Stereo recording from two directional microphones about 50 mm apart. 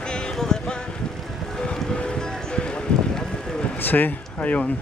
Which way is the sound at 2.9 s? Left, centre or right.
Left.